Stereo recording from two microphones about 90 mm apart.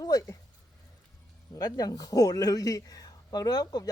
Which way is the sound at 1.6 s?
45° left (ahead or behind).